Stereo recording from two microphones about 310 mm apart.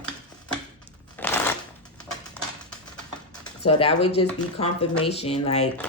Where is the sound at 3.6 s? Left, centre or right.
Centre.